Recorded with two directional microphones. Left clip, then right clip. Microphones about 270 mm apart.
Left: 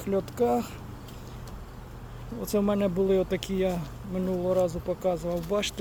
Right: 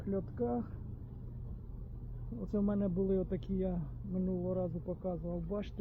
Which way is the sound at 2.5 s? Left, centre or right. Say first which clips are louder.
Left 11 dB; centre.